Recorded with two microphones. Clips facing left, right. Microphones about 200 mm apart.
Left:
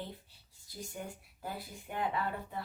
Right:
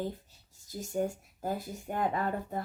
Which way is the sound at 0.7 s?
45° right (ahead or behind).